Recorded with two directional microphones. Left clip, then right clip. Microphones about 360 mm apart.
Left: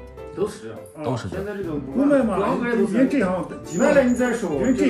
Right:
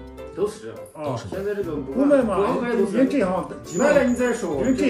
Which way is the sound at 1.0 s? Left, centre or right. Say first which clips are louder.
Right 1 dB; centre.